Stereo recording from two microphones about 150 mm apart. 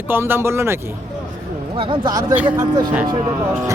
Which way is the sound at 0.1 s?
15° right (ahead or behind).